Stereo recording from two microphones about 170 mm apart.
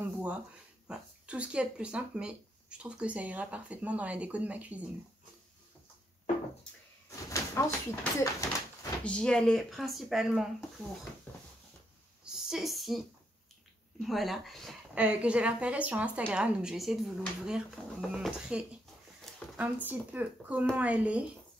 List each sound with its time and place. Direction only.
0.0 s a sound: 10° right (ahead or behind)
0.8 s a woman's voice: 5° right (ahead or behind)
7.1 s speech: 15° left (ahead or behind); by 10.5 s centre (ahead or behind)
11.3 s a sound: 10° left (ahead or behind)
12.3 s a woman's voice: 5° right (ahead or behind)
14.0 s a woman's voice: centre (ahead or behind)
18.1 s a woman's voice: 5° right (ahead or behind)